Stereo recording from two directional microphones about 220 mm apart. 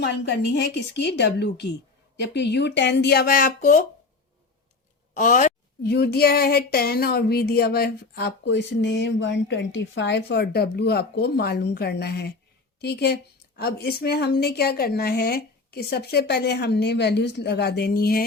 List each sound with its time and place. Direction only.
0.0 s speech: 50° left (ahead or behind)
5.1 s speech: 35° left (ahead or behind)